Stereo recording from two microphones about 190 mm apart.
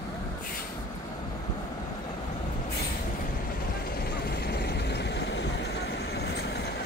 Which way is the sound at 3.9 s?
55° left (ahead or behind).